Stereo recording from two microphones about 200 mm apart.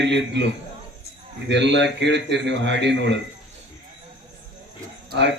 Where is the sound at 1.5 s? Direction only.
60° right (ahead or behind).